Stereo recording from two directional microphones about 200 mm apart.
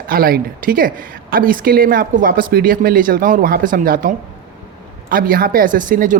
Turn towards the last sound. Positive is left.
turn(degrees=-40)  # may be behind; listen again after turning